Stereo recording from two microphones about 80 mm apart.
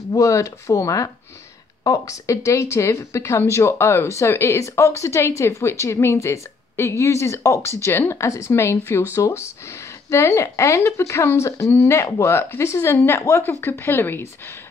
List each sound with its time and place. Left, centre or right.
0.1 s a woman's voice: left